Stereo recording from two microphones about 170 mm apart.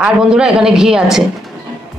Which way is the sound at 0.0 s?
5° right (ahead or behind).